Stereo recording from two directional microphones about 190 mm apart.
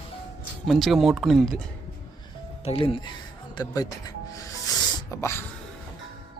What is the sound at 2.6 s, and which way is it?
Speech, 30° left (ahead or behind).